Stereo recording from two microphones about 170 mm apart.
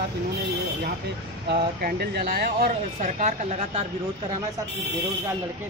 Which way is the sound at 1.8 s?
65° right (ahead or behind).